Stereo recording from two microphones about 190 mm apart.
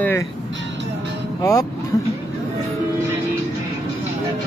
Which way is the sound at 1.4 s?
15° left (ahead or behind).